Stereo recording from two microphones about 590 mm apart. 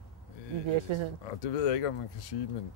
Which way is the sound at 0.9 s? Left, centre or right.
Right.